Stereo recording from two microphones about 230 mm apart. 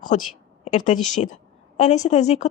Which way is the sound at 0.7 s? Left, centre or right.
Left.